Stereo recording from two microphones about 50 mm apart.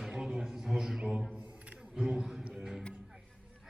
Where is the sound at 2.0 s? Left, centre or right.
Centre.